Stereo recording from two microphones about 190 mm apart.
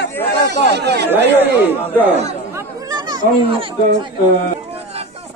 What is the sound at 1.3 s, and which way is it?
Speech, 10° left (ahead or behind).